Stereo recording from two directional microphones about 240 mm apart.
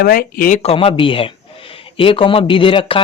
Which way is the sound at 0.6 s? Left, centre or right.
Left.